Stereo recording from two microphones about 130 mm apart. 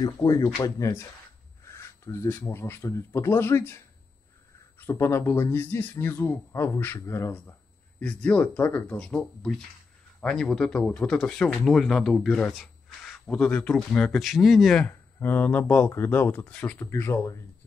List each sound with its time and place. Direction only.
0.0 s a man's voice: 25° left (ahead or behind)
8.0 s a man's voice: 10° left (ahead or behind)